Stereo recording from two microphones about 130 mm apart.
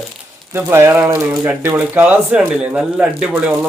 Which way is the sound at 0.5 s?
20° right (ahead or behind).